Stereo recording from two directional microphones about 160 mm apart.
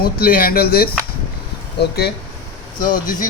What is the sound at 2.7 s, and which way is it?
Speech, 60° left (ahead or behind).